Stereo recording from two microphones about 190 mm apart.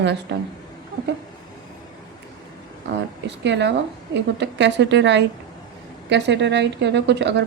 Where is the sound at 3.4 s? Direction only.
65° right (ahead or behind).